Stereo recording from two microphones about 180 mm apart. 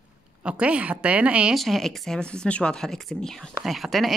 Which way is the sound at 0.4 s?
5° right (ahead or behind).